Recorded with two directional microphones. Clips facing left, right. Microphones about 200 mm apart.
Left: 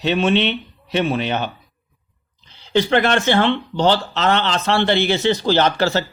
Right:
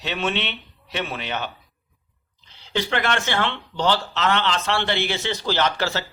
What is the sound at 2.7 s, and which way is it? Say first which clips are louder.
A man's voice: left 7 dB; 30° left (ahead or behind).